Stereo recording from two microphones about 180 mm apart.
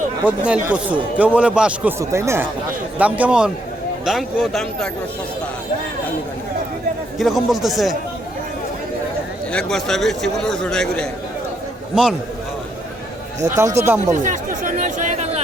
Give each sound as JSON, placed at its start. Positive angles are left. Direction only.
{"t": 0.3, "sound": "a man's voice", "side_deg": -5}
{"t": 7.2, "sound": "a man's voice", "side_deg": 0}
{"t": 9.5, "sound": "a man's voice", "side_deg": 5}
{"t": 13.6, "sound": "a man's voice", "side_deg": -15}
{"t": 14.1, "sound": "speech", "side_deg": -45}